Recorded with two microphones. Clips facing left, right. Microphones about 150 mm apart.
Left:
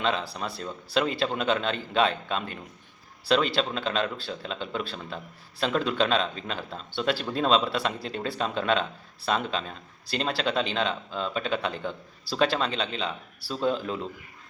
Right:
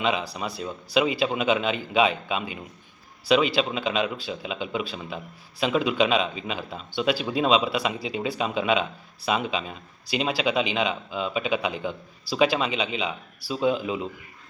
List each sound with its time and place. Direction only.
0.0 s speech: 10° right (ahead or behind)